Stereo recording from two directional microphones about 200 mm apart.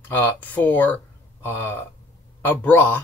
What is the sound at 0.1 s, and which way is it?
Speech, 10° left (ahead or behind).